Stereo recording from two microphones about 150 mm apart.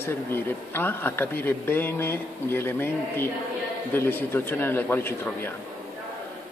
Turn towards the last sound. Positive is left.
turn(degrees=15)  # may be behind; listen again after turning